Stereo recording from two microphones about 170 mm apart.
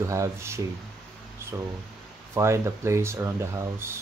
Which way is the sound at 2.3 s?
15° right (ahead or behind).